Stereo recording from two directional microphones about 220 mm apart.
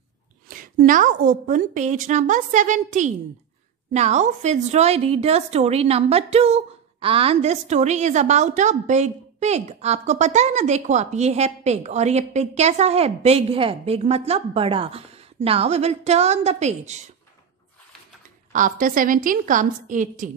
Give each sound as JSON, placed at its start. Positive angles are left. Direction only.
{"t": 0.5, "sound": "a woman's voice", "side_deg": -40}
{"t": 18.5, "sound": "a woman's voice", "side_deg": -35}